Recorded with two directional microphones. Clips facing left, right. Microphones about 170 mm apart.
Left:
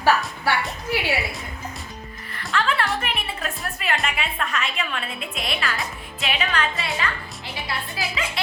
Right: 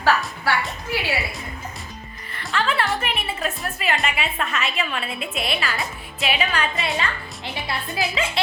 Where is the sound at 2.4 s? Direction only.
Centre (ahead or behind).